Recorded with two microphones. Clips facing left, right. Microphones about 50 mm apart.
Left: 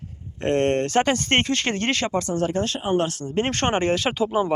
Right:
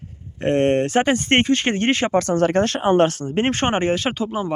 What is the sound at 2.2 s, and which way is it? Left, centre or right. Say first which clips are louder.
Speech: right 6 dB; right.